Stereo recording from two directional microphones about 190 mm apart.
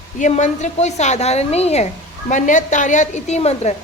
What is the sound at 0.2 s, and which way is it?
A woman's voice, 40° left (ahead or behind).